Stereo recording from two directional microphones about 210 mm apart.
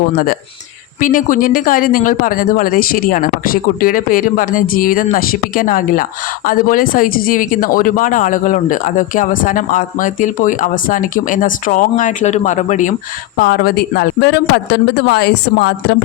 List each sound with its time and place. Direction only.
0.9 s speech: 40° left (ahead or behind)